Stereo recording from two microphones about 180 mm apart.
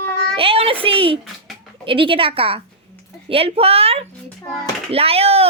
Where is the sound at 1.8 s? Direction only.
30° right (ahead or behind).